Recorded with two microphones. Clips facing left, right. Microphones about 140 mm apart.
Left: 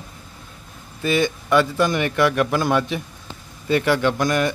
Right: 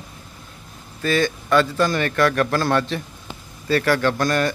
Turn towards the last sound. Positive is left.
turn(degrees=15)  # may be behind; listen again after turning